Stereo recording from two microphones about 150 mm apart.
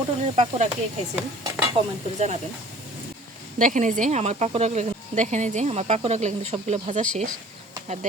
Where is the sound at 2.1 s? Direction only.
50° right (ahead or behind).